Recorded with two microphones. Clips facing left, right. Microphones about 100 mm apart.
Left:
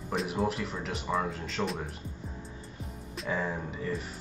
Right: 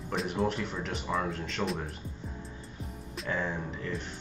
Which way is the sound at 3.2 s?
5° left (ahead or behind).